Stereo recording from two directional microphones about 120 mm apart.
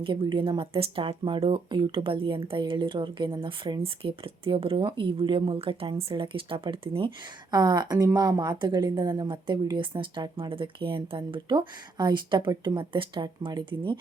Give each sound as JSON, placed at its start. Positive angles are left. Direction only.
{"t": 0.0, "sound": "a woman's voice", "side_deg": -45}